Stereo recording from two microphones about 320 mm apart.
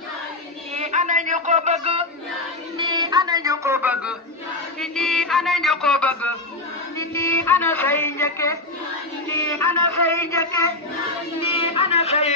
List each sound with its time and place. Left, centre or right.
0.7 s a sound: right
2.8 s speech: centre
4.7 s music: centre
7.0 s speech: centre
9.3 s music: centre
11.5 s a sound: centre